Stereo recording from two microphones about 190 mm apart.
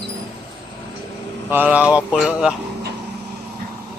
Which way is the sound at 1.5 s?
10° right (ahead or behind).